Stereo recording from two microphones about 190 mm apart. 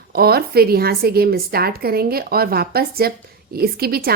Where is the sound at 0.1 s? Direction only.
55° right (ahead or behind).